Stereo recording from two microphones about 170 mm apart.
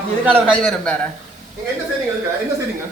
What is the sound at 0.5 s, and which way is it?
Speech, 5° left (ahead or behind).